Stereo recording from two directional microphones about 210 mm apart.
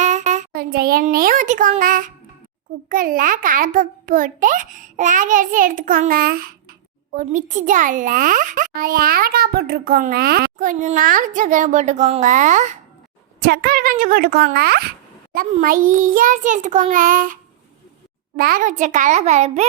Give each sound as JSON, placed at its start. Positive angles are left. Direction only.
{"t": 0.0, "sound": "a child's voice", "side_deg": -35}
{"t": 13.4, "sound": "a woman's voice", "side_deg": -50}
{"t": 18.3, "sound": "a child's voice", "side_deg": -45}